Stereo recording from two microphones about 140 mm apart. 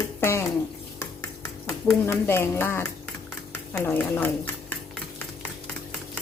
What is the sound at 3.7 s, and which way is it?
Speech, 15° left (ahead or behind).